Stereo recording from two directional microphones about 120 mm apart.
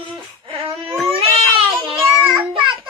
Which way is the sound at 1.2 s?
50° right (ahead or behind).